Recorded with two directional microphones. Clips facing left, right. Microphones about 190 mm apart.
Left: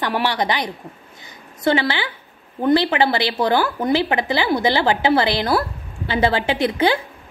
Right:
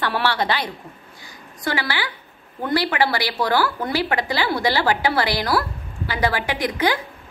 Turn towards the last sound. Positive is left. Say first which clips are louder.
# left 4 dB
turn(degrees=25)  # may be behind; listen again after turning